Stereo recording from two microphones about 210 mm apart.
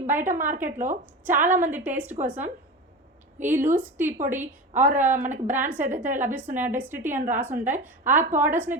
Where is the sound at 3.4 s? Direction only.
10° right (ahead or behind).